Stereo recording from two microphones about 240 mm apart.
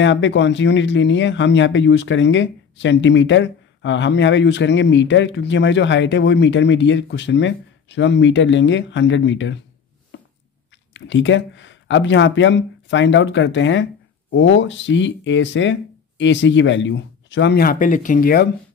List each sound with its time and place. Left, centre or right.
0.0 s speech: left
10.1 s a sound: left
10.9 s speech: left